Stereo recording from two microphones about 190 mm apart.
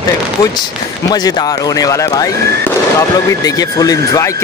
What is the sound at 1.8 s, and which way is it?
Speech, 20° left (ahead or behind).